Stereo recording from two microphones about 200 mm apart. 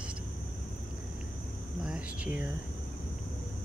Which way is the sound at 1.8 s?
5° right (ahead or behind).